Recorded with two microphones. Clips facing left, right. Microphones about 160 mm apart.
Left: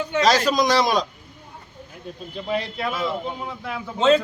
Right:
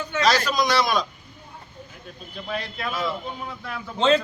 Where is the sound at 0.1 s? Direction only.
35° left (ahead or behind).